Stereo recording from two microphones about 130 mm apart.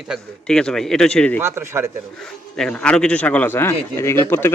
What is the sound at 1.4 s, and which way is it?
Speech, 20° right (ahead or behind).